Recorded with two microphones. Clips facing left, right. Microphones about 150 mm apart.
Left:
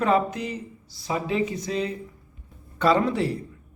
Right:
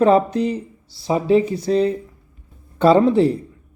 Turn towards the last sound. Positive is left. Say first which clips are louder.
# right 8 dB
turn(degrees=-30)  # may be behind; listen again after turning